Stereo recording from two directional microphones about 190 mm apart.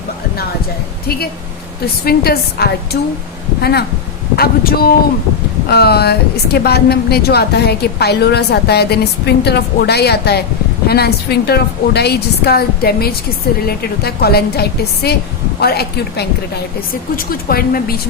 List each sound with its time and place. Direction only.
2.0 s a woman's voice: 55° left (ahead or behind)